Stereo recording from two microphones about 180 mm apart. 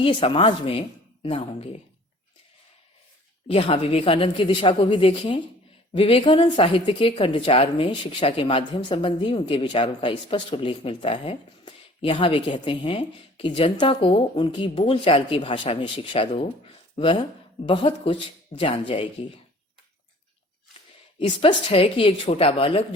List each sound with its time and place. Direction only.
0.0 s speech: 30° left (ahead or behind)
3.5 s speech: 30° left (ahead or behind)
21.2 s speech: 30° left (ahead or behind)